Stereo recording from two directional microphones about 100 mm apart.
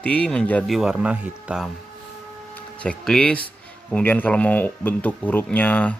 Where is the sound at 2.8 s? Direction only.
10° left (ahead or behind).